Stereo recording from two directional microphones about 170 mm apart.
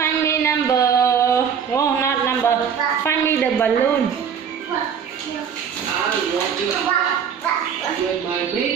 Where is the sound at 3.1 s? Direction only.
10° left (ahead or behind).